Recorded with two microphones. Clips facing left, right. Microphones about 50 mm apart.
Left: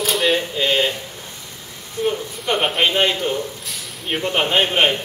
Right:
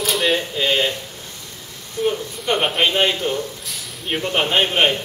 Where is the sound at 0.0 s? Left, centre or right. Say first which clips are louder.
Left 1 dB; centre.